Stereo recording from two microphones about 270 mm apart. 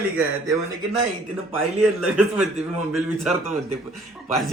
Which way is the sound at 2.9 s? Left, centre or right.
Centre.